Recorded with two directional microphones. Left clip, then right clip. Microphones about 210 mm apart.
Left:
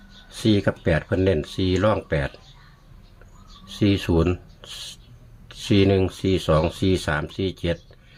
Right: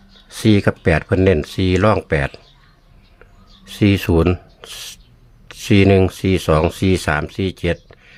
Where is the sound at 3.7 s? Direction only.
35° right (ahead or behind).